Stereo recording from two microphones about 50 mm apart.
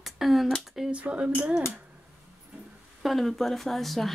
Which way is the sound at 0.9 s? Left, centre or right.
Right.